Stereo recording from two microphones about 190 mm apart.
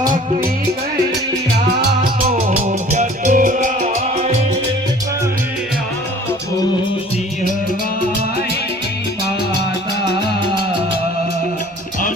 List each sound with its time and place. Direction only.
1.5 s music: 40° right (ahead or behind)